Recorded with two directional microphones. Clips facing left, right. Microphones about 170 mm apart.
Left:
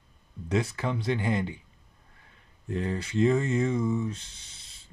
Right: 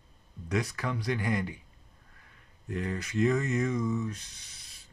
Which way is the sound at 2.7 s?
30° left (ahead or behind).